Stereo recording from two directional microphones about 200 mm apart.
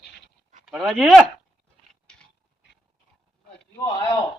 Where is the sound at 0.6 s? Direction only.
Centre (ahead or behind).